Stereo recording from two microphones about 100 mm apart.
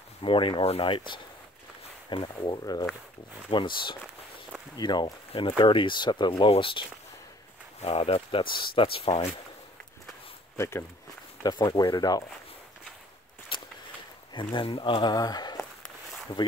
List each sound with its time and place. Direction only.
0.2 s speech: 60° left (ahead or behind); by 2.9 s 40° left (ahead or behind)
3.4 s speech: 55° left (ahead or behind)
6.5 s speech: 60° left (ahead or behind)
7.8 s speech: 75° left (ahead or behind)
11.4 s speech: 45° left (ahead or behind)
13.5 s walk: 55° left (ahead or behind)
14.3 s speech: 50° left (ahead or behind)